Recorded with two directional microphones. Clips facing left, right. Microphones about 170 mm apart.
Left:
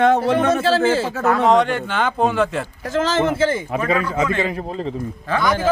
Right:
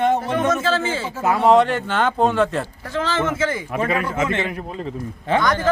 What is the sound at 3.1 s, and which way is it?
Speech, 35° left (ahead or behind).